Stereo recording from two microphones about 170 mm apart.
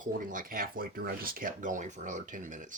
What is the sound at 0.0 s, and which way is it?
Speech, 50° right (ahead or behind).